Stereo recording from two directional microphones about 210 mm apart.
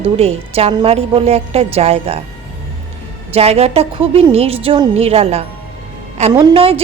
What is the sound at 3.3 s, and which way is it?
A woman's voice, 30° right (ahead or behind).